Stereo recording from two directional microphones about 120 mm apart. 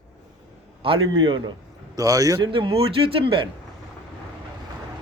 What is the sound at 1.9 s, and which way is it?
Speech, 30° right (ahead or behind).